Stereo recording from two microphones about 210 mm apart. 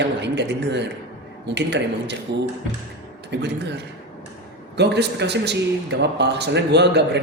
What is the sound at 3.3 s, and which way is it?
Speech, 55° right (ahead or behind).